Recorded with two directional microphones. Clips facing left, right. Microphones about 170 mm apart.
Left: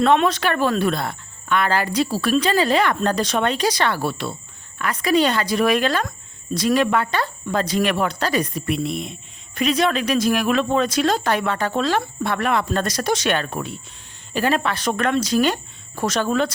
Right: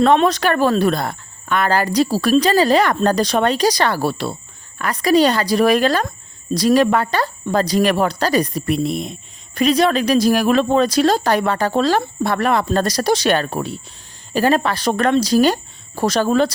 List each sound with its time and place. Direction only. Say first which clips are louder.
0.0 s speech: right 3 dB; 40° right (ahead or behind)